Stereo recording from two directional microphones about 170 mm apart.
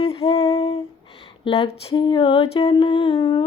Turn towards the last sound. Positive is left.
turn(degrees=30)  # may be behind; listen again after turning